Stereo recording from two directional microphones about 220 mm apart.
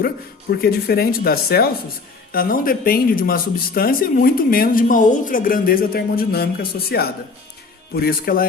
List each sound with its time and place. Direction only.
0.5 s speech: 45° left (ahead or behind)